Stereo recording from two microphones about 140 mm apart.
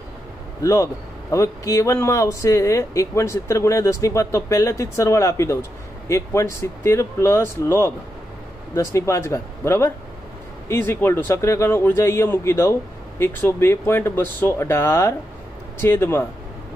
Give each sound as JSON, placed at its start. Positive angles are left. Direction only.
{"t": 0.6, "sound": "speech", "side_deg": 20}